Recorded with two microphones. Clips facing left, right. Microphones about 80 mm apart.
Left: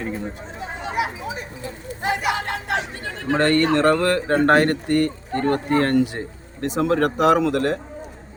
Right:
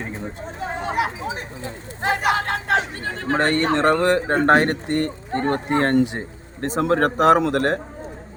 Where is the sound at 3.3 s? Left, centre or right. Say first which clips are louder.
Left 2 dB; right.